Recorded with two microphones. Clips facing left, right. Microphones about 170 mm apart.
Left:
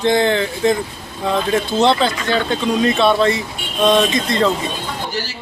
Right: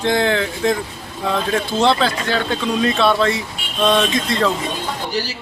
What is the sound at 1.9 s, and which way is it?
Speech, centre (ahead or behind).